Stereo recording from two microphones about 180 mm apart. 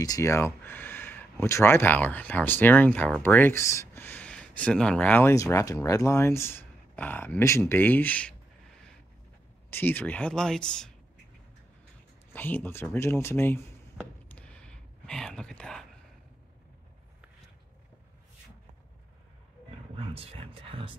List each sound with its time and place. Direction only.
0.0 s speech: 20° left (ahead or behind)
9.7 s speech: 10° left (ahead or behind)
12.3 s speech: 10° left (ahead or behind)
14.3 s whispering: 5° left (ahead or behind)
20.0 s speech: 30° right (ahead or behind)